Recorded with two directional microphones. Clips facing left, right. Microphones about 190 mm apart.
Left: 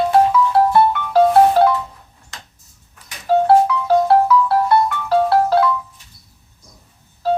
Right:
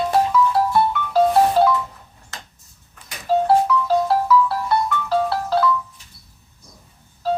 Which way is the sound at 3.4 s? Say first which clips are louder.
Left 4 dB; 60° left (ahead or behind).